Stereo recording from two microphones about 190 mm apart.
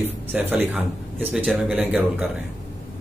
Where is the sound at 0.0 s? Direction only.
10° right (ahead or behind).